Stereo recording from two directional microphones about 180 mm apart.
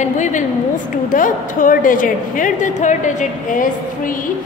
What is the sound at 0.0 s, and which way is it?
A woman's voice, 45° left (ahead or behind).